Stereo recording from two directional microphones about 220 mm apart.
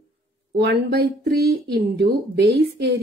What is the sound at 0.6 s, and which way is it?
Speech, 45° right (ahead or behind).